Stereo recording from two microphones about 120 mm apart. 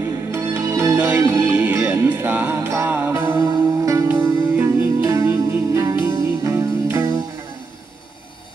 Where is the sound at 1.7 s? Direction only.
25° right (ahead or behind).